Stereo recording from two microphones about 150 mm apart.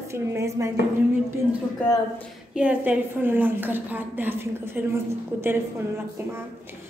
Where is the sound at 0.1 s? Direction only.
20° right (ahead or behind).